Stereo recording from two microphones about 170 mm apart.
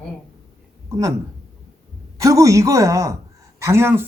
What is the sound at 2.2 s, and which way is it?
Speech, 20° right (ahead or behind).